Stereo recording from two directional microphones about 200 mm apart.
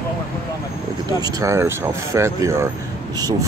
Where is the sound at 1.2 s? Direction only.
15° right (ahead or behind).